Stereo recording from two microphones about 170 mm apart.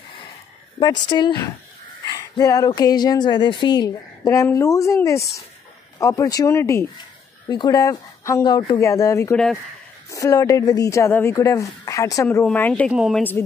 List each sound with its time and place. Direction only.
0.7 s speech: 25° left (ahead or behind); by 12.9 s 10° left (ahead or behind)
12.9 s speech: 5° right (ahead or behind)